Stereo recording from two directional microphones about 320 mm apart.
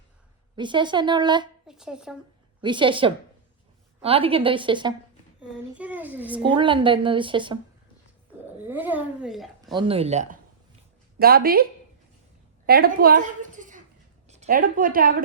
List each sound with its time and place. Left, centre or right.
0.5 s a woman's voice: centre
1.6 s speech: centre
2.6 s a woman's voice: centre
6.5 s a woman's voice: centre
8.6 s speech: centre
9.7 s speech: centre
12.6 s a woman's voice: right